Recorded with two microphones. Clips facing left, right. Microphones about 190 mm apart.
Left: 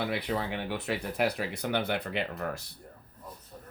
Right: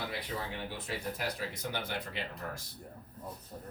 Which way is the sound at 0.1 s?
70° left (ahead or behind).